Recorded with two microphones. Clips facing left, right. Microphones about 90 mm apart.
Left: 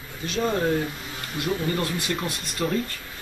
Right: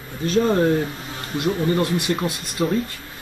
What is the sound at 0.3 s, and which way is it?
Speech, 40° right (ahead or behind).